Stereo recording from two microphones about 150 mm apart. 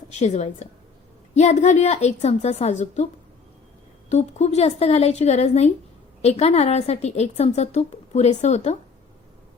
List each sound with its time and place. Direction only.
0.1 s a woman's voice: 50° left (ahead or behind)
4.1 s a woman's voice: 45° left (ahead or behind)